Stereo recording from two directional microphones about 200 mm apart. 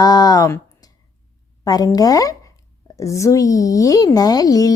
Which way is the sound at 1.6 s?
20° left (ahead or behind).